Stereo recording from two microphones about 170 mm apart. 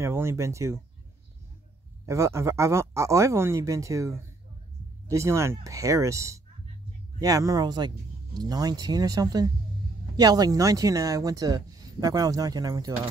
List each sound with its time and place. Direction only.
0.0 s speech: 15° right (ahead or behind)
2.0 s speech: 15° right (ahead or behind)